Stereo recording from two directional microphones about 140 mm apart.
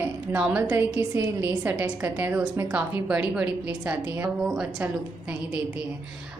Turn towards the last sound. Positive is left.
turn(degrees=-10)  # may be behind; listen again after turning